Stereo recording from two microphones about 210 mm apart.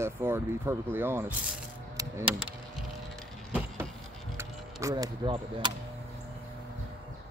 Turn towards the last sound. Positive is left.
turn(degrees=-20)  # may be behind; listen again after turning